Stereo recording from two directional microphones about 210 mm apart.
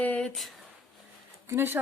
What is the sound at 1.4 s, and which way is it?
Speech, 10° right (ahead or behind).